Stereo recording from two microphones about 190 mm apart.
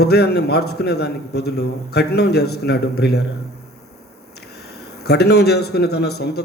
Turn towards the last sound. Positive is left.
turn(degrees=60)  # may be behind; listen again after turning